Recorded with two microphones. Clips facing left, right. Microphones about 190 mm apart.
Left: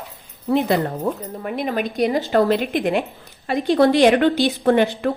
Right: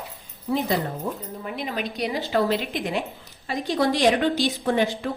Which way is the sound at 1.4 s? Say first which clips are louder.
Left 7 dB; 55° left (ahead or behind).